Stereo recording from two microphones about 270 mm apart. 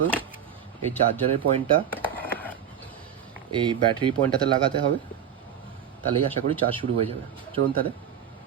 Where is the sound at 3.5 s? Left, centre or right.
Centre.